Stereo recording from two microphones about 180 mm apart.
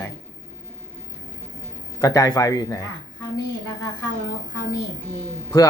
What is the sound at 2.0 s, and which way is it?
Speech, 20° left (ahead or behind).